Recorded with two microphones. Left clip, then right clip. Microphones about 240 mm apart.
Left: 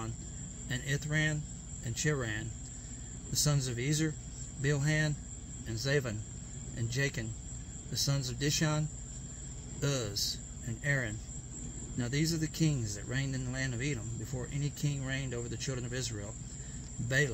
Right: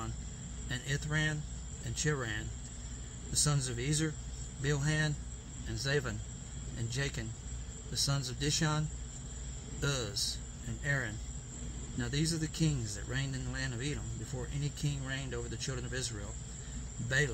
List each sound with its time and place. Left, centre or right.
0.7 s speech: left
12.0 s speech: left